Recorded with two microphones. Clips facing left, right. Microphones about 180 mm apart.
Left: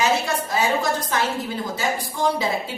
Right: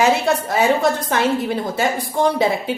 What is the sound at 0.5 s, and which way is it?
A woman's voice, 60° right (ahead or behind).